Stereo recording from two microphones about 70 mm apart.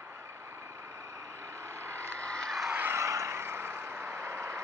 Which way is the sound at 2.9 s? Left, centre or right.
Right.